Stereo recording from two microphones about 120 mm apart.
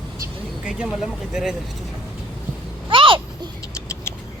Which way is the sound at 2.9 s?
45° right (ahead or behind).